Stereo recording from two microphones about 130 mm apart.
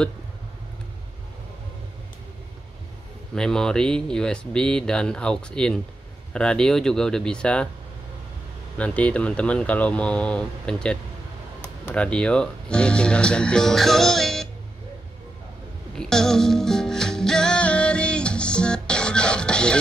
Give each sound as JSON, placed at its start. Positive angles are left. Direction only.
{"t": 3.3, "sound": "speech", "side_deg": 5}
{"t": 8.7, "sound": "speech", "side_deg": 10}
{"t": 16.0, "sound": "music", "side_deg": 5}